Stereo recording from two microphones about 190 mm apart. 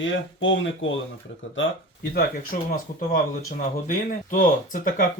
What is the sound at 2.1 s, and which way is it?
Speech, 50° left (ahead or behind).